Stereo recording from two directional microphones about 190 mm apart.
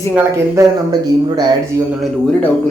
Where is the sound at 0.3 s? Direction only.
15° right (ahead or behind).